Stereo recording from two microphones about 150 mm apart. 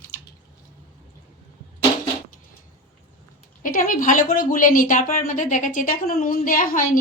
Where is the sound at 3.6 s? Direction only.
65° left (ahead or behind).